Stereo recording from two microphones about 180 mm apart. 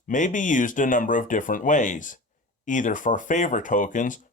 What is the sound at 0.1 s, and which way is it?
Speech, 45° left (ahead or behind).